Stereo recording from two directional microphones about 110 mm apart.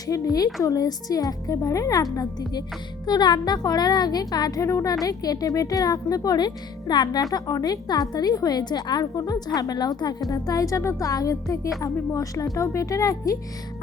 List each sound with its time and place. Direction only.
0.1 s speech: 35° left (ahead or behind)